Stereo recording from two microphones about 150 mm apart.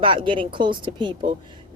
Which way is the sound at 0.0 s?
35° right (ahead or behind).